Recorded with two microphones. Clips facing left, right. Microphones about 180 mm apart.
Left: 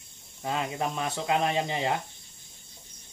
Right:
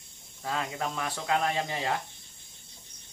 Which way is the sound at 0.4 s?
20° left (ahead or behind).